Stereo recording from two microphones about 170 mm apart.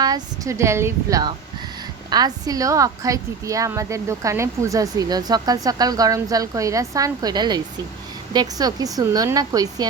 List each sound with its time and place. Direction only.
0.0 s a woman's voice: 20° right (ahead or behind)